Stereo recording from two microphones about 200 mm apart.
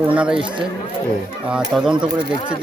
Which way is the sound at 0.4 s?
25° right (ahead or behind).